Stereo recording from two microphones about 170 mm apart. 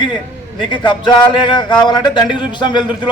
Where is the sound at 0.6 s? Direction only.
30° left (ahead or behind).